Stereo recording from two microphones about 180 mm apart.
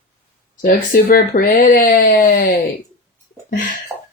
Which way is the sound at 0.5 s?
55° left (ahead or behind).